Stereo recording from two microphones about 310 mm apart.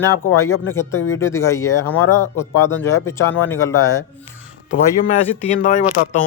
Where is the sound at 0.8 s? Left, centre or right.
Centre.